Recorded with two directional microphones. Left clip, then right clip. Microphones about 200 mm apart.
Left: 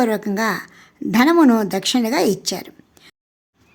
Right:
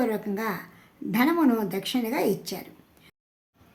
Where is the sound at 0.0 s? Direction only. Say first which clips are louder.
Left 8 dB; 45° left (ahead or behind).